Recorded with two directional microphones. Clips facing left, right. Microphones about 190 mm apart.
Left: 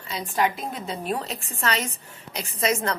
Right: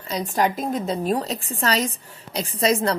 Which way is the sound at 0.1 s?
40° right (ahead or behind).